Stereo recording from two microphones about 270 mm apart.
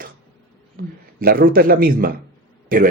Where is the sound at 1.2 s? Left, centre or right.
Right.